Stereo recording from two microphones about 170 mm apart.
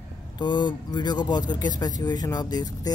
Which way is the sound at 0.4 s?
25° left (ahead or behind).